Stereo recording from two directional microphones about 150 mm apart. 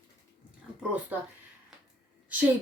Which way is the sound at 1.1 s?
10° right (ahead or behind).